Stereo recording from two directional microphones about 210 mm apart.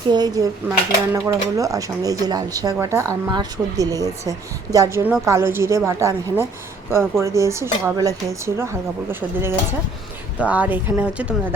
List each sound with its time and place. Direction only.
0.1 s speech: 20° right (ahead or behind)